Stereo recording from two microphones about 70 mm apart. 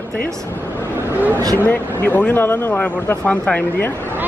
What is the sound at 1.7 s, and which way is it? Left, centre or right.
Speech, left.